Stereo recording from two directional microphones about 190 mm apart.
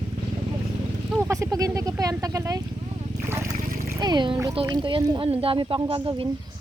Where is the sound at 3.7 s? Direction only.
50° right (ahead or behind).